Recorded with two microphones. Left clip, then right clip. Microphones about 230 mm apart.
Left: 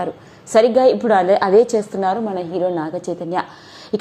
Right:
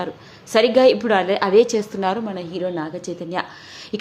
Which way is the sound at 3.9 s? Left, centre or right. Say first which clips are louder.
Left 6 dB; centre.